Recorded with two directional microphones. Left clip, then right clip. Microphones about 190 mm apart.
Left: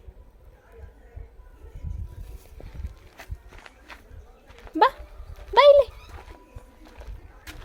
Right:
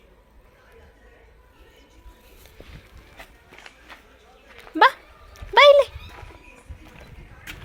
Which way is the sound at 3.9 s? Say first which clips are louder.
Right 1 dB; 10° left (ahead or behind).